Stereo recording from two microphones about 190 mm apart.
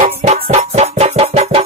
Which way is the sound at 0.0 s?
35° right (ahead or behind).